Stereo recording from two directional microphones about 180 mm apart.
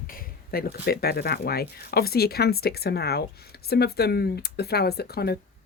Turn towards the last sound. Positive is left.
turn(degrees=60)  # may be behind; listen again after turning